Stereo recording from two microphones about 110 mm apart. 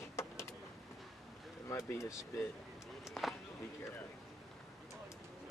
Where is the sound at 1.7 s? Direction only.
25° left (ahead or behind).